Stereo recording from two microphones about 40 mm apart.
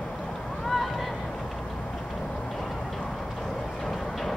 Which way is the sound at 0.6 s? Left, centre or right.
Centre.